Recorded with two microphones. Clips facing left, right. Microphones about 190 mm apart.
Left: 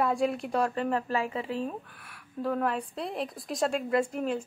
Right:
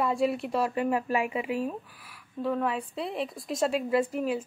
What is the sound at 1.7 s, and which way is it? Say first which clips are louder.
A woman's voice: right 2 dB; centre (ahead or behind).